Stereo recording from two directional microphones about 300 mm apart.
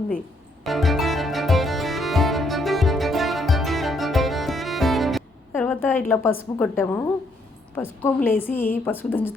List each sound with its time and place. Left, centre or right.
0.6 s music: centre
7.8 s a woman's voice: centre